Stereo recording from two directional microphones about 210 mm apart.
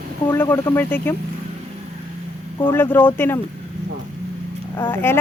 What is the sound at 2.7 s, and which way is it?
Speech, 10° left (ahead or behind).